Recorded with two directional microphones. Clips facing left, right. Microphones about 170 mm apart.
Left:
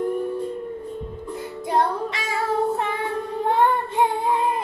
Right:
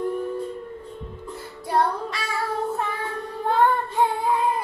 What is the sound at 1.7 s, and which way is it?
Child singing, 20° left (ahead or behind).